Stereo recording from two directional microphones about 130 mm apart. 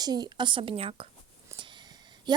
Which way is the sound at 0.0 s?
30° right (ahead or behind).